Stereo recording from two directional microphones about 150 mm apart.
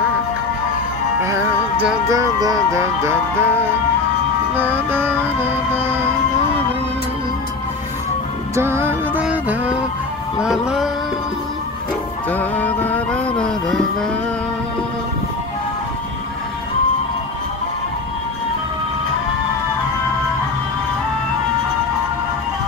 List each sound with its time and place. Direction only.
2.0 s music: 20° right (ahead or behind)
4.6 s music: 15° right (ahead or behind)
8.5 s music: 15° right (ahead or behind)
10.4 s a sound: 5° right (ahead or behind)
12.3 s music: 10° left (ahead or behind)